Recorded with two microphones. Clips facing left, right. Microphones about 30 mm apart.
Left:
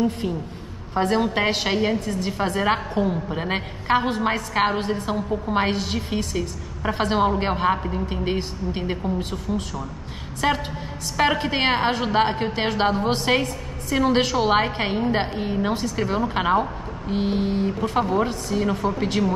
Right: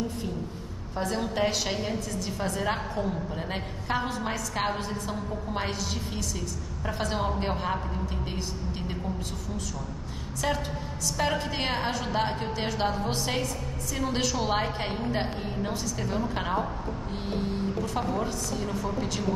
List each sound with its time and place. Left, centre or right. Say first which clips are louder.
0.9 s a woman's voice: left 8 dB; left